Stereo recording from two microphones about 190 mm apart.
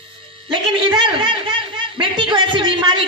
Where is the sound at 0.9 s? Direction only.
25° right (ahead or behind).